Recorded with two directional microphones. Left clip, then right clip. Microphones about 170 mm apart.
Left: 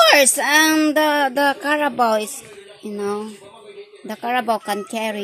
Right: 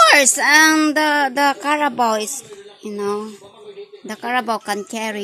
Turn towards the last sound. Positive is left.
turn(degrees=0)  # may be behind; listen again after turning